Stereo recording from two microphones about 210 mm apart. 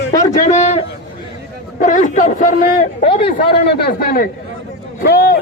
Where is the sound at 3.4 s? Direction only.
50° left (ahead or behind).